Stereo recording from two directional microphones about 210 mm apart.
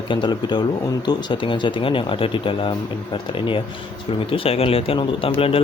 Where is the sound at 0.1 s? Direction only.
20° left (ahead or behind).